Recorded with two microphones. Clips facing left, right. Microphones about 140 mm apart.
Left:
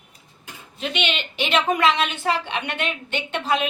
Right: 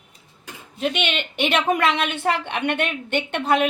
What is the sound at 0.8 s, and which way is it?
A woman's voice, 50° right (ahead or behind).